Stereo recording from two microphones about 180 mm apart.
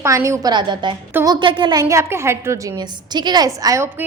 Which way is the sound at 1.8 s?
15° right (ahead or behind).